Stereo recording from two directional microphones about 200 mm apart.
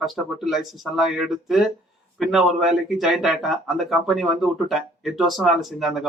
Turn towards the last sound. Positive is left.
turn(degrees=0)  # may be behind; listen again after turning